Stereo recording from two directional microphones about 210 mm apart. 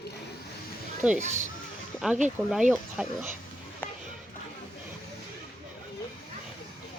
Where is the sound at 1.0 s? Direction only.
5° right (ahead or behind).